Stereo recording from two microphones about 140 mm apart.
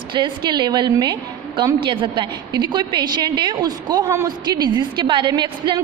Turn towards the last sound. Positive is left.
turn(degrees=-30)  # may be behind; listen again after turning